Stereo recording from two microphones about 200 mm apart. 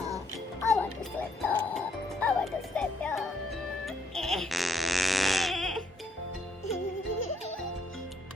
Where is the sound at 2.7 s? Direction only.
5° left (ahead or behind).